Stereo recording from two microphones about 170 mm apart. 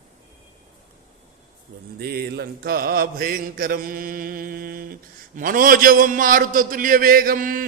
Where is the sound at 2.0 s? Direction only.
65° right (ahead or behind).